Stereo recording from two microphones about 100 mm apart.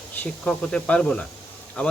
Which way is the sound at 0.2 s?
10° left (ahead or behind).